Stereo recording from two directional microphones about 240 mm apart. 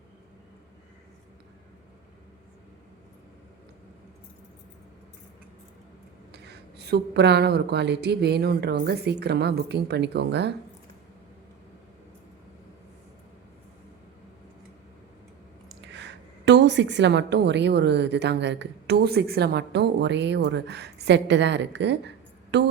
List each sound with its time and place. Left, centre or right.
6.3 s a woman's voice: right
15.8 s a woman's voice: right